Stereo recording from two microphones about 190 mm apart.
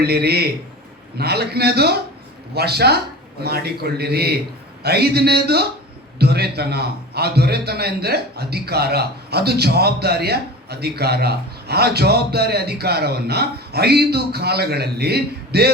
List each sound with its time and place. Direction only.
0.0 s a man's voice: 55° right (ahead or behind)